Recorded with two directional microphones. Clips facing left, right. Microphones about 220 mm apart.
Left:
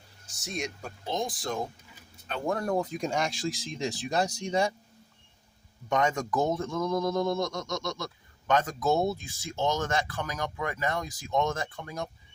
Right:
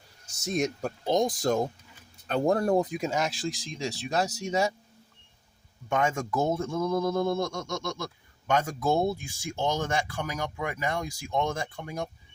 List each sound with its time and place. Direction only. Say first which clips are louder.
0.4 s speech: right 7 dB; 45° right (ahead or behind)
2.8 s speech: right 1 dB; 10° right (ahead or behind)
5.9 s speech: even; 10° right (ahead or behind)